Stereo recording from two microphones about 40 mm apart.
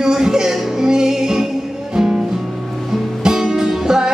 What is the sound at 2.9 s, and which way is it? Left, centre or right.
Music, centre.